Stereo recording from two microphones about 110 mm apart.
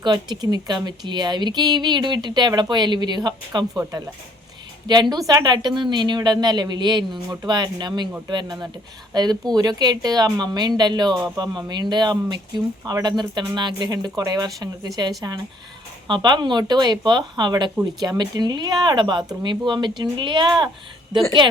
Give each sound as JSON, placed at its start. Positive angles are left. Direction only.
{"t": 0.0, "sound": "speech", "side_deg": -40}
{"t": 4.9, "sound": "speech", "side_deg": -40}